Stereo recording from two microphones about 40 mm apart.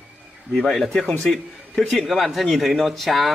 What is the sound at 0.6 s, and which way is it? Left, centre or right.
Speech, centre.